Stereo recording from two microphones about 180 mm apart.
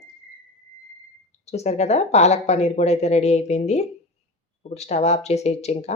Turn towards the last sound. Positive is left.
turn(degrees=35)  # may be behind; listen again after turning